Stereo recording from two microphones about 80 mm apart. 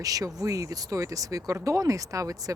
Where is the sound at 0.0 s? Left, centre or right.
Right.